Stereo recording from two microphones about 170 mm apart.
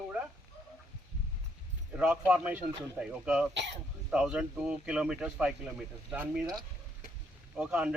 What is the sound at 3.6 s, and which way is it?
Speech, 90° right.